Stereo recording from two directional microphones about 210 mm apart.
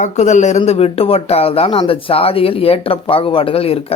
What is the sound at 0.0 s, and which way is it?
Speech, 35° left (ahead or behind).